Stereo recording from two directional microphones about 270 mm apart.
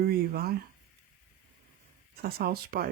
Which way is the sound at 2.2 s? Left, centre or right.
Right.